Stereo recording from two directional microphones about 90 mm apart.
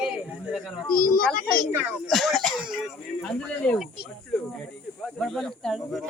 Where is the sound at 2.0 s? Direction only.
Centre (ahead or behind).